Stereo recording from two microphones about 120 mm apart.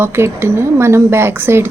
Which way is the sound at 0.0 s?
20° right (ahead or behind).